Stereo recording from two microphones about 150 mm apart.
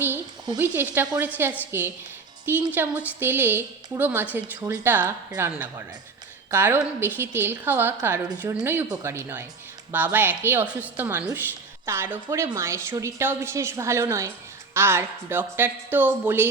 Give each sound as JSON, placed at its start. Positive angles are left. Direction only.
{"t": 0.6, "sound": "a woman's voice", "side_deg": -15}